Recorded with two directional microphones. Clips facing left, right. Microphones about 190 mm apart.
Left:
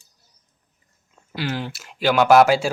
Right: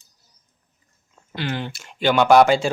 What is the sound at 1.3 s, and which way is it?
Speech, 5° left (ahead or behind).